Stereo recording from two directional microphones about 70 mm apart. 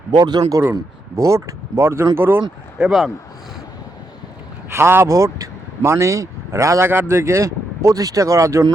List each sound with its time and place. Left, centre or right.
0.1 s speech: right
0.6 s speech: right
1.2 s speech: right
2.7 s speech: centre
4.7 s speech: right
5.0 s speech: right